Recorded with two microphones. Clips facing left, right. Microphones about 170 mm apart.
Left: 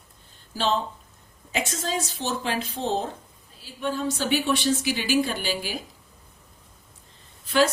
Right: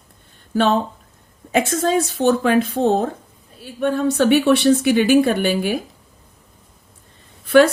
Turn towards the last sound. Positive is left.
turn(degrees=-60)  # may be behind; listen again after turning